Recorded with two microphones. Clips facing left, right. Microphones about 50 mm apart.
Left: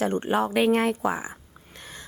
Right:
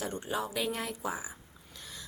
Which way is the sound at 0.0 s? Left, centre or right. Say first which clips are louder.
Left 11 dB; left.